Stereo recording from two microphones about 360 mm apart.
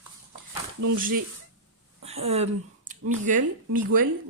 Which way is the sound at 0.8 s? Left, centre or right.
Right.